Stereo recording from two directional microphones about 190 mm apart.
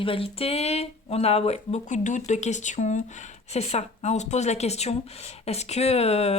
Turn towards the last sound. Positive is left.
turn(degrees=35)  # may be behind; listen again after turning